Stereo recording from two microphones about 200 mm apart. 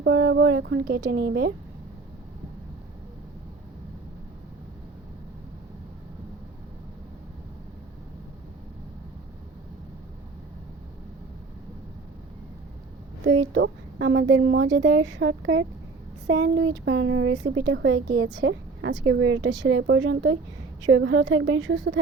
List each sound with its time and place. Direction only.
0.0 s a woman's voice: 65° right (ahead or behind)
13.2 s a woman's voice: 65° right (ahead or behind)